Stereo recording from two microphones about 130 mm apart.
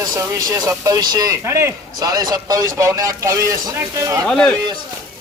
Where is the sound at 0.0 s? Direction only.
25° right (ahead or behind).